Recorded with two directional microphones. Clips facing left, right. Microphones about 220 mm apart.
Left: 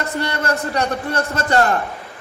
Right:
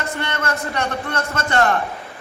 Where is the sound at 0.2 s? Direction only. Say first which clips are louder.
Left 5 dB; 35° left (ahead or behind).